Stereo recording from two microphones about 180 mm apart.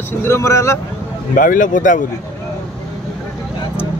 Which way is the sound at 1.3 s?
50° left (ahead or behind).